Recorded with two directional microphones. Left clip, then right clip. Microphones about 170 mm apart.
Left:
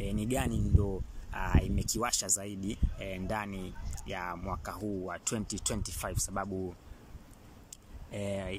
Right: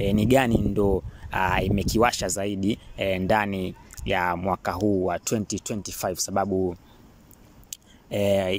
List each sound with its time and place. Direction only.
0.0 s speech: 60° right (ahead or behind)
5.2 s speech: 20° right (ahead or behind); by 6.7 s 40° right (ahead or behind)
7.7 s a sound: 50° right (ahead or behind)